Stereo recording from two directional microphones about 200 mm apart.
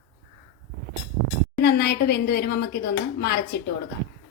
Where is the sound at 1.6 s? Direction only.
55° left (ahead or behind).